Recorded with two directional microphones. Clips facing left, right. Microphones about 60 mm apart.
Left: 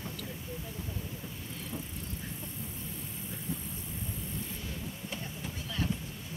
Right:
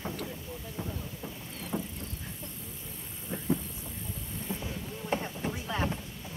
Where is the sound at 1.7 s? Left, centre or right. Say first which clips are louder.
Right 8 dB; right.